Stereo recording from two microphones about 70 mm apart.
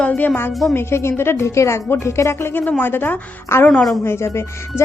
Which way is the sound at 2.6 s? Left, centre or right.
Left.